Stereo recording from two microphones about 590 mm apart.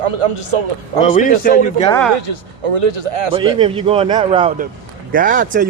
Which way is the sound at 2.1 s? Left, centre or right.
Right.